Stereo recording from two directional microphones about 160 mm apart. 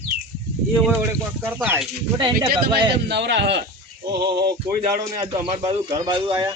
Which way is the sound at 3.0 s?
90° right.